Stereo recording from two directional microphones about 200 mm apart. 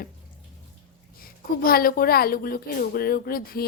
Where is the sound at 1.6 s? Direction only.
45° left (ahead or behind).